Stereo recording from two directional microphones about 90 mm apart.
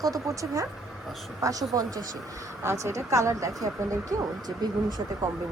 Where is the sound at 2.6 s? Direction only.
30° right (ahead or behind).